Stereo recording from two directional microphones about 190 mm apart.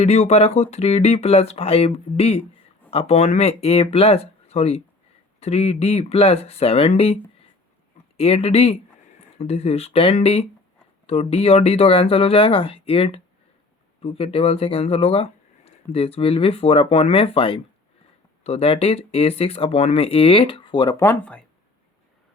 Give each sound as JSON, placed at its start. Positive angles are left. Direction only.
{"t": 0.0, "sound": "speech", "side_deg": 35}